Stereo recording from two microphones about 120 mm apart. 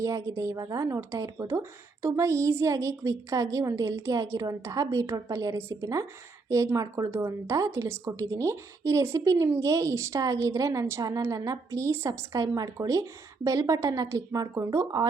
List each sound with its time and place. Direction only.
0.0 s a woman's voice: 30° right (ahead or behind)
7.1 s a woman's voice: 25° right (ahead or behind)